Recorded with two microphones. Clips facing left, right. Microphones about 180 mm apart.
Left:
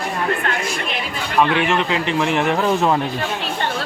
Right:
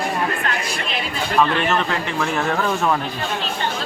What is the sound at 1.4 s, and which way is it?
A man's voice, 15° left (ahead or behind).